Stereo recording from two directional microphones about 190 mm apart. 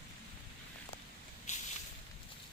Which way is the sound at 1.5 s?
35° left (ahead or behind).